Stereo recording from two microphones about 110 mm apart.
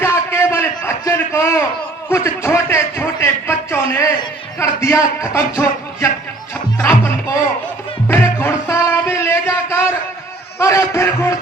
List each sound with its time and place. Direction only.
0.0 s a sound: 20° left (ahead or behind)
2.0 s speech: 25° left (ahead or behind)
6.7 s music: 20° left (ahead or behind)